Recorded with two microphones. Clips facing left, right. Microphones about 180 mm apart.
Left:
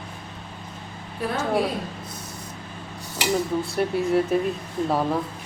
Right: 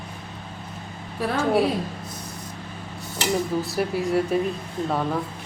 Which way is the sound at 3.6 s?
Centre (ahead or behind).